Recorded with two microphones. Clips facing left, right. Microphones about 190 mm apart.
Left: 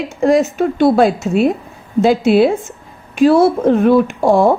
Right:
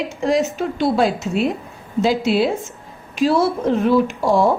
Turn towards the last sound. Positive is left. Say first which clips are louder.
# left 5 dB
turn(degrees=55)  # may be behind; listen again after turning